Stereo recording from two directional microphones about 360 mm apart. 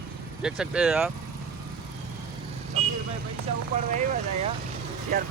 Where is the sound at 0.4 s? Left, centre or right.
Centre.